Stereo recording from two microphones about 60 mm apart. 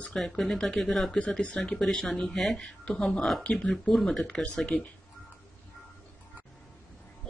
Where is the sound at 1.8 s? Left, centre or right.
Centre.